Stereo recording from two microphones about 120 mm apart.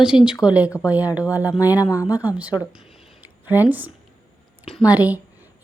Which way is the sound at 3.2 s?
15° right (ahead or behind).